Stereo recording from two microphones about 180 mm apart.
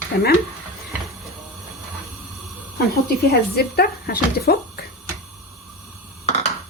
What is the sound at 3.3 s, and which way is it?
Speech, 60° left (ahead or behind).